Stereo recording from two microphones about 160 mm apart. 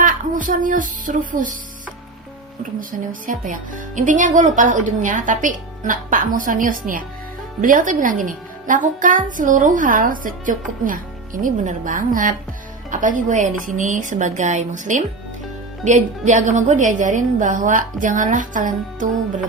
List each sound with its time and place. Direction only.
0.0 s speech: 55° right (ahead or behind)
3.1 s speech: 55° right (ahead or behind)